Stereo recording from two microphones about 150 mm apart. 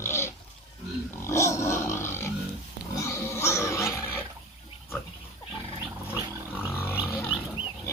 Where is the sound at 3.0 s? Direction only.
20° left (ahead or behind).